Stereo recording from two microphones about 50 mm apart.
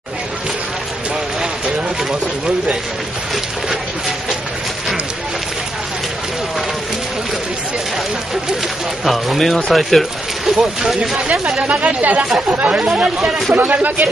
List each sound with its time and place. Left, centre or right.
2.0 s speech: centre
9.0 s speech: centre
10.4 s speech: centre
11.1 s speech: right
13.6 s speech: right